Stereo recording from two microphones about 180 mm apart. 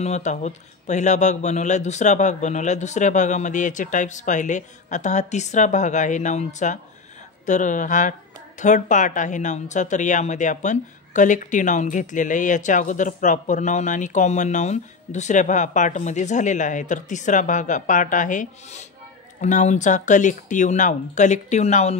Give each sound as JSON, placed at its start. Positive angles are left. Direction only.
{"t": 0.0, "sound": "speech", "side_deg": 40}